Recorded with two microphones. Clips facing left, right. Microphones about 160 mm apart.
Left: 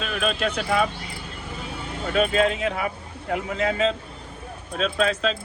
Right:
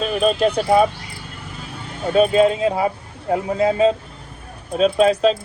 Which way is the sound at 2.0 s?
30° right (ahead or behind).